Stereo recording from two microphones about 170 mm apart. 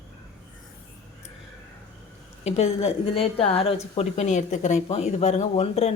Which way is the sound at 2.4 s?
40° left (ahead or behind).